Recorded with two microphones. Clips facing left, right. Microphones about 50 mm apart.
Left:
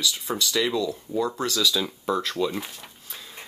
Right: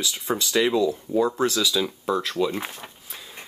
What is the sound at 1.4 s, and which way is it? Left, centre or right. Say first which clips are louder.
Speech: right 2 dB; centre.